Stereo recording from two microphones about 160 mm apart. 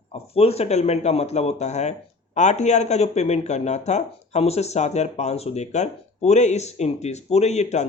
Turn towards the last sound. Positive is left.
turn(degrees=45)  # may be behind; listen again after turning